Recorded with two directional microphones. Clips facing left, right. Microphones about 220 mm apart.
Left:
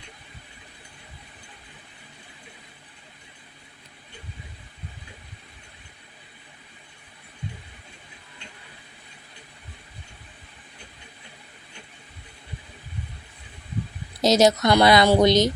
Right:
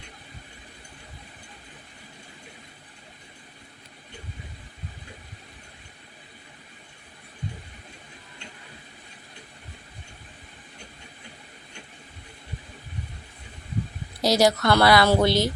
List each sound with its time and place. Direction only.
14.2 s a woman's voice: 20° left (ahead or behind)